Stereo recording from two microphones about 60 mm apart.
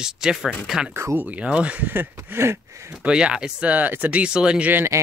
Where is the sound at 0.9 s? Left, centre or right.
Right.